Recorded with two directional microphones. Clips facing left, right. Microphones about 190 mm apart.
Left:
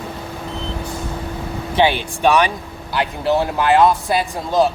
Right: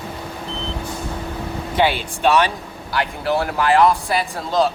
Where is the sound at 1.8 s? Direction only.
15° left (ahead or behind).